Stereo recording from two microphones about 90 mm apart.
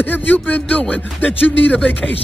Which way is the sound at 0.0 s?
20° left (ahead or behind).